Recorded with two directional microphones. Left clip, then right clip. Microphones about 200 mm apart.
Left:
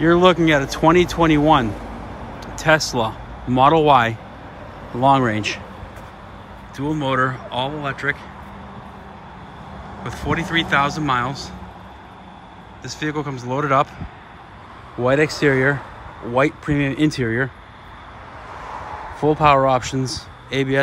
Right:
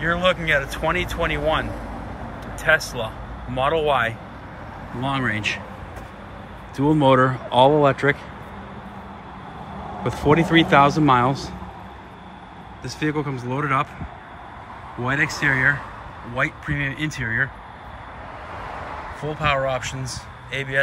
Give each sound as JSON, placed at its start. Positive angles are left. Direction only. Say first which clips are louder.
{"t": 0.0, "sound": "speech", "louder": "left 6 dB", "side_deg": 20}
{"t": 2.4, "sound": "a sound", "louder": "left 2 dB", "side_deg": 25}
{"t": 3.6, "sound": "speech", "louder": "left 6 dB", "side_deg": 25}
{"t": 5.0, "sound": "speech", "louder": "left 7 dB", "side_deg": 15}
{"t": 6.8, "sound": "speech", "louder": "right 4 dB", "side_deg": -10}
{"t": 10.0, "sound": "speech", "louder": "right 5 dB", "side_deg": -15}
{"t": 12.8, "sound": "speech", "louder": "even", "side_deg": 0}
{"t": 15.0, "sound": "speech", "louder": "left 4 dB", "side_deg": 5}
{"t": 19.4, "sound": "speech", "louder": "left 6 dB", "side_deg": 20}